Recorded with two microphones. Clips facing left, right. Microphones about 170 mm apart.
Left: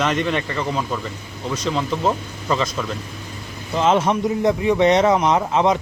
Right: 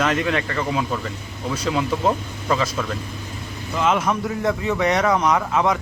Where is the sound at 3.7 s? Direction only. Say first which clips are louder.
Left 3 dB; 30° left (ahead or behind).